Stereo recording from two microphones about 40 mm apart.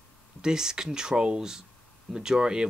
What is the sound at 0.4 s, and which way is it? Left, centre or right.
Speech, centre.